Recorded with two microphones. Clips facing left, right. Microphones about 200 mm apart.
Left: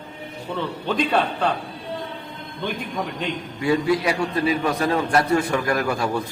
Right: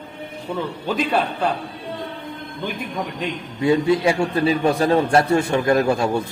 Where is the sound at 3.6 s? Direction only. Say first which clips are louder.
Right 3 dB; 25° right (ahead or behind).